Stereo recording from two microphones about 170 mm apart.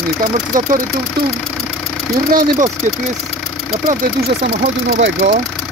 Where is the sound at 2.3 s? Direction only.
55° right (ahead or behind).